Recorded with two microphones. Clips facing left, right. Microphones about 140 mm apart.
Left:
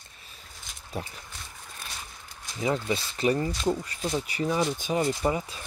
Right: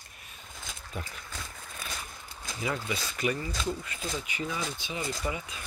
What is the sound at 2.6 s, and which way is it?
Speech, 30° left (ahead or behind).